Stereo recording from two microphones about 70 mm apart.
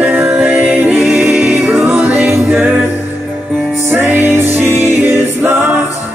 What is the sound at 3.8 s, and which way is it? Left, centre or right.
Music, right.